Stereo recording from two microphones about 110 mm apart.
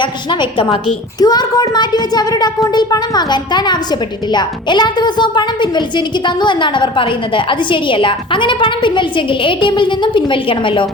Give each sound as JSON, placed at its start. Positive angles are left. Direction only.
{"t": 0.0, "sound": "a woman's voice", "side_deg": 45}